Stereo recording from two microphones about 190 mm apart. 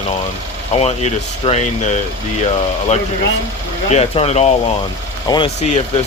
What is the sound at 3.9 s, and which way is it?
Speech, 30° left (ahead or behind).